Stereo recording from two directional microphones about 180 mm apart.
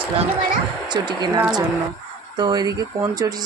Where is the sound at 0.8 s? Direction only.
25° right (ahead or behind).